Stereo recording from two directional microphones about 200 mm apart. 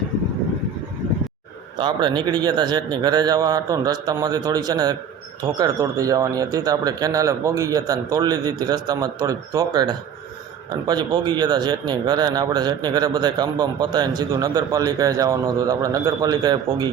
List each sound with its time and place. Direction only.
1.8 s a man's voice: 20° right (ahead or behind)